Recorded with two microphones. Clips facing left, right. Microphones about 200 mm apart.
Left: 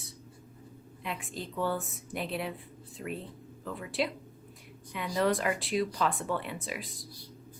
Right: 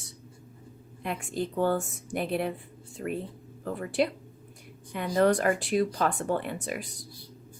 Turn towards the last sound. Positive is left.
turn(degrees=-50)  # may be behind; listen again after turning